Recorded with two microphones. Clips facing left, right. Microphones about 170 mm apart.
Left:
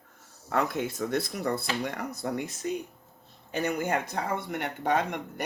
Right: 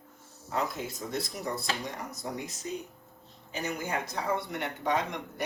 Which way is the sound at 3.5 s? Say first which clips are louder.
Left 5 dB; 60° left (ahead or behind).